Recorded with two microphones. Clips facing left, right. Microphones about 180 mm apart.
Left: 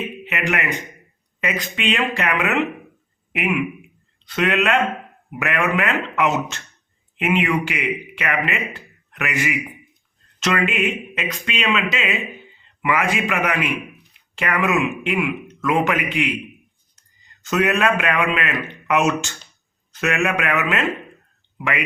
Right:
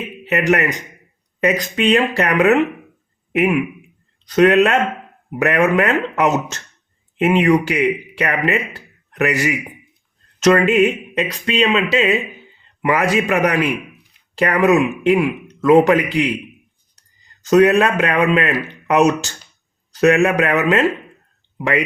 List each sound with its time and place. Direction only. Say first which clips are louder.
0.3 s speech: right 8 dB; 40° right (ahead or behind)
17.4 s speech: right 7 dB; 35° right (ahead or behind)